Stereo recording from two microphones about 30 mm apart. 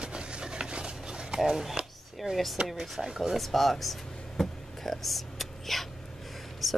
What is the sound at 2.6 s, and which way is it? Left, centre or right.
Speech, right.